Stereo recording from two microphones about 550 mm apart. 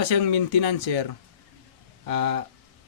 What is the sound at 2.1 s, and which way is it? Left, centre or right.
Speech, left.